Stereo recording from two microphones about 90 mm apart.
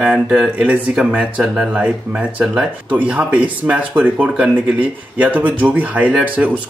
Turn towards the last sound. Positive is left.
turn(degrees=-15)  # may be behind; listen again after turning